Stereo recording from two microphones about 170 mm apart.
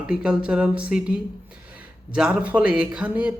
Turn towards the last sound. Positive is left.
turn(degrees=-10)  # may be behind; listen again after turning